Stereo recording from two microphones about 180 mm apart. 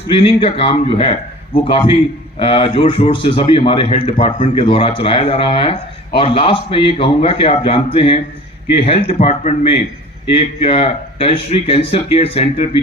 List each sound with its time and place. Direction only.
0.1 s a man's voice: 30° left (ahead or behind)